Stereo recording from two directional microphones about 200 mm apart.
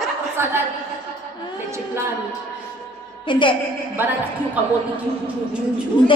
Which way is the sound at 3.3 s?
25° left (ahead or behind).